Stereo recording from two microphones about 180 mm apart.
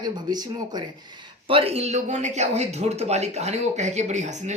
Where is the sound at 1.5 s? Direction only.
30° right (ahead or behind).